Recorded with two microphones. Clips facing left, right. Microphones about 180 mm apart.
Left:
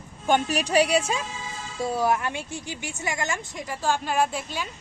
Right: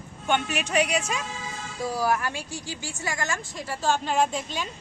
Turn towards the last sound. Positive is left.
turn(degrees=10)  # may be behind; listen again after turning